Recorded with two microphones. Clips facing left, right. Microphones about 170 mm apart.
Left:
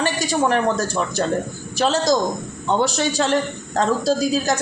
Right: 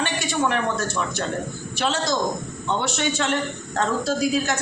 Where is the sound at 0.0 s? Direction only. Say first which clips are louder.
Left 4 dB; 40° left (ahead or behind).